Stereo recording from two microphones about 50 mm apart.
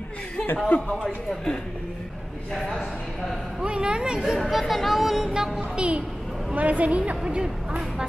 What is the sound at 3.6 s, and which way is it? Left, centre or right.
Speech, centre.